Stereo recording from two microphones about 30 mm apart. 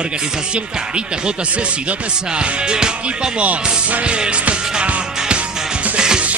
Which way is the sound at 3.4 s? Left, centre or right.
Right.